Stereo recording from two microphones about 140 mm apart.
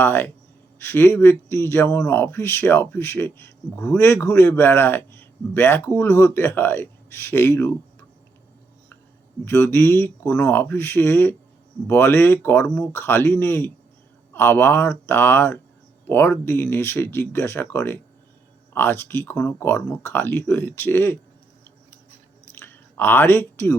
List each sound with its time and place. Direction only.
0.0 s speech: 15° left (ahead or behind)
9.4 s speech: 15° left (ahead or behind)
22.5 s a sound: 15° left (ahead or behind)